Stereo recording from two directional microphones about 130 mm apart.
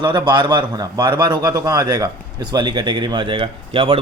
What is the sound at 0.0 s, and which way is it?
A man's voice, 35° right (ahead or behind).